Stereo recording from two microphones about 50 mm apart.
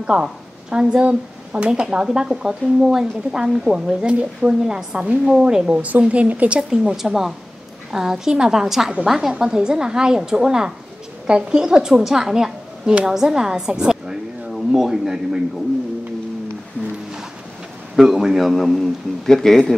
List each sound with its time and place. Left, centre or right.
0.0 s speech: centre
5.8 s speech: right
6.7 s a woman's voice: centre
17.9 s a man's voice: centre